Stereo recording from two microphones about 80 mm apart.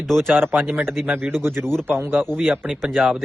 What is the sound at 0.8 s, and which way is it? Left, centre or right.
Speech, centre.